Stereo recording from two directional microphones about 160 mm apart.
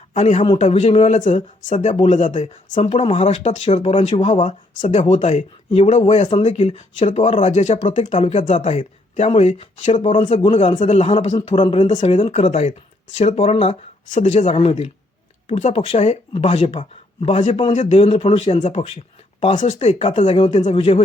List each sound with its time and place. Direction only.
0.1 s a man's voice: 45° left (ahead or behind)
0.4 s speech: 35° left (ahead or behind); by 2.9 s 50° left (ahead or behind)
2.9 s speech: 35° left (ahead or behind)
11.3 s speech: 30° left (ahead or behind)
12.3 s speech: 45° left (ahead or behind)
14.1 s speech: 50° left (ahead or behind)